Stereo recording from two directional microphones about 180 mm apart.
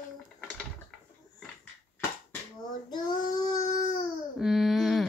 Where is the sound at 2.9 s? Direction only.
20° left (ahead or behind).